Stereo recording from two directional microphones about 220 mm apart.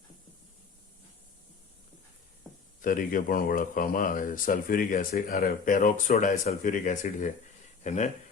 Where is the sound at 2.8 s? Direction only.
40° left (ahead or behind).